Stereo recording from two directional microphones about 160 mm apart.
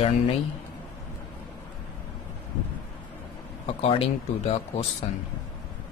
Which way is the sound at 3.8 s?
35° left (ahead or behind).